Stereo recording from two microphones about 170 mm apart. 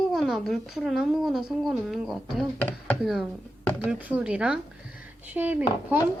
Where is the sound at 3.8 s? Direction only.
10° right (ahead or behind).